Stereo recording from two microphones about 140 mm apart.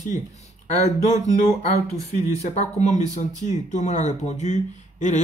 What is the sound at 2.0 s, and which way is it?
Speech, 55° left (ahead or behind).